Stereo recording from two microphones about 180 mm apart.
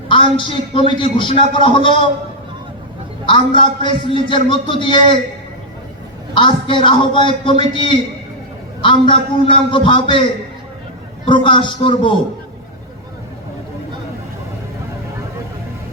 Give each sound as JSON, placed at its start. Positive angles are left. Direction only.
{"t": 0.1, "sound": "a man's voice", "side_deg": 30}
{"t": 3.2, "sound": "a man's voice", "side_deg": 30}
{"t": 6.3, "sound": "a man's voice", "side_deg": 30}
{"t": 11.3, "sound": "a man's voice", "side_deg": 25}